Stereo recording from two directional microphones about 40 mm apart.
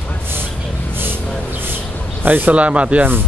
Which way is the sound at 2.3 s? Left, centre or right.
Right.